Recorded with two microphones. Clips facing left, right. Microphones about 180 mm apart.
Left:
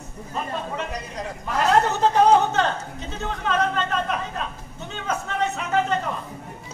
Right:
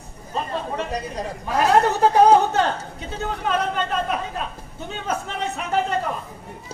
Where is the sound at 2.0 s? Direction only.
10° right (ahead or behind).